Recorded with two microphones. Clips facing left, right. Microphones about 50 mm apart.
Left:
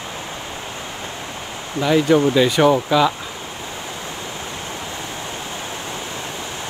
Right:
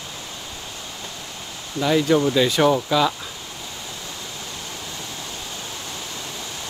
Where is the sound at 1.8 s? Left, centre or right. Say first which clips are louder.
Left 3 dB; centre.